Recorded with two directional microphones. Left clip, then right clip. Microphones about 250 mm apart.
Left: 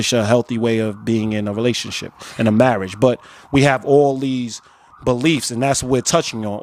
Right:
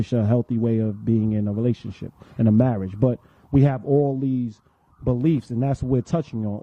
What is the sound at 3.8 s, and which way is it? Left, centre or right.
Speech, left.